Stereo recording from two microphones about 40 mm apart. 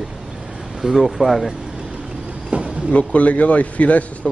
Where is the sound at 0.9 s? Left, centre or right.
Centre.